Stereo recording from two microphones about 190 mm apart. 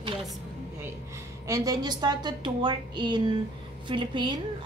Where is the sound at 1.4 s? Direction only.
20° right (ahead or behind).